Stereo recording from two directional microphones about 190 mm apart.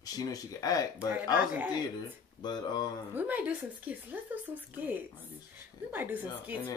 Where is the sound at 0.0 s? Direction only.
20° left (ahead or behind).